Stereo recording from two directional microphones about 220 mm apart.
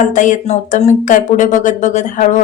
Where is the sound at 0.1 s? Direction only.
35° left (ahead or behind).